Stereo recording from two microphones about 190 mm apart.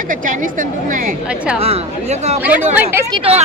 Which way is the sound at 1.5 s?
35° right (ahead or behind).